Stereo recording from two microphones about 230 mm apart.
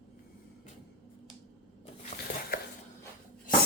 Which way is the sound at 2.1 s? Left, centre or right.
Left.